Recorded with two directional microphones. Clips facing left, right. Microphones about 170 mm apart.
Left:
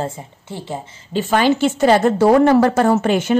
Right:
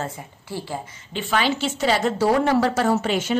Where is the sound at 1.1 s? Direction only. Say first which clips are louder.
Left 7 dB; 45° left (ahead or behind).